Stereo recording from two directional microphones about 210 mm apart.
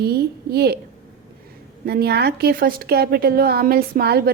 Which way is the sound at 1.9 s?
50° right (ahead or behind).